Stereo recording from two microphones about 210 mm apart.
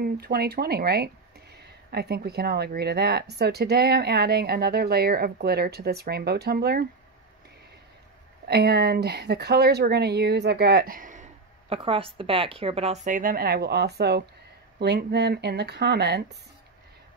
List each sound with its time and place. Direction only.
0.0 s speech: 45° right (ahead or behind)
8.5 s speech: 50° right (ahead or behind)
11.7 s a woman's voice: 25° right (ahead or behind); by 16.3 s 50° right (ahead or behind)